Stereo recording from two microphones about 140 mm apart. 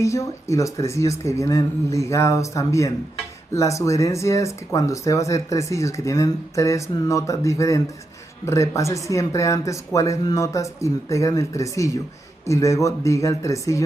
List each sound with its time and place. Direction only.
0.0 s speech: 20° left (ahead or behind)